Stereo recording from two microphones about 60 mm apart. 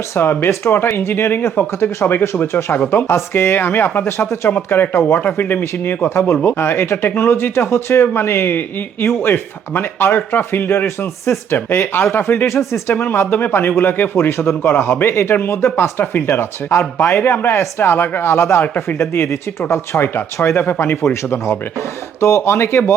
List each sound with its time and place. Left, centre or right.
0.2 s speech: left
4.2 s speech: left
5.2 s speech: left
12.9 s speech: left
14.7 s speech: left
18.3 s speech: left